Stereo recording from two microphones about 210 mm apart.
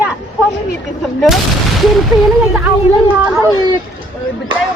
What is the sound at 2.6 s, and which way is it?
Speech, 10° right (ahead or behind).